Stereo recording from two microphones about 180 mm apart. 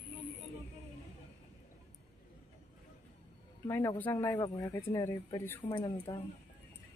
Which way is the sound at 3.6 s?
10° left (ahead or behind).